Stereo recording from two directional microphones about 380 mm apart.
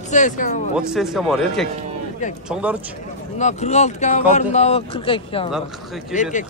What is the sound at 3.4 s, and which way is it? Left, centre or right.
Speech, centre.